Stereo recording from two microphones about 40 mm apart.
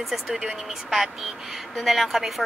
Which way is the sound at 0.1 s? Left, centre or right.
Centre.